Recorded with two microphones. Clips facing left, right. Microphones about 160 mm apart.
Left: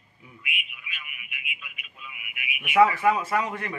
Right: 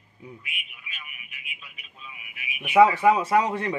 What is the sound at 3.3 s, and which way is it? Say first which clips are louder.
Speech: right 5 dB; 30° right (ahead or behind).